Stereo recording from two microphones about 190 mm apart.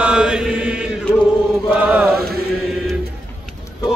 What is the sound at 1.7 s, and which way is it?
Chant, 5° right (ahead or behind).